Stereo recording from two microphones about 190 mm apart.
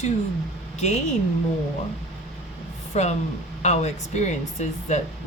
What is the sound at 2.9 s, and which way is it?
A woman's voice, 35° left (ahead or behind).